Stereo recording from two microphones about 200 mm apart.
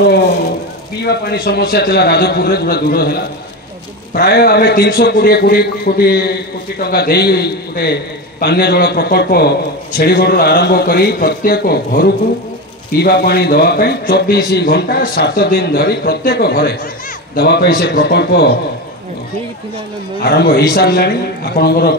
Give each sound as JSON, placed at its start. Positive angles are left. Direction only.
{"t": 1.0, "sound": "a man's voice", "side_deg": 55}
{"t": 20.2, "sound": "a man's voice", "side_deg": 50}